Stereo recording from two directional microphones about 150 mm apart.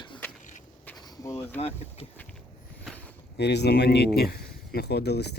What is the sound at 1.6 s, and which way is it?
Speech, 45° left (ahead or behind).